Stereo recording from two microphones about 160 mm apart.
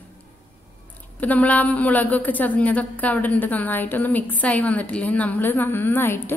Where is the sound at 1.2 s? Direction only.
10° left (ahead or behind).